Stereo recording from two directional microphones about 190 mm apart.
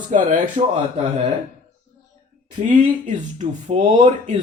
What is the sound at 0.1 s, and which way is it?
Speech, 40° right (ahead or behind).